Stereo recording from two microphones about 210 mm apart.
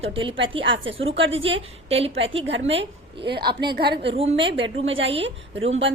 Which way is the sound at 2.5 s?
60° right (ahead or behind).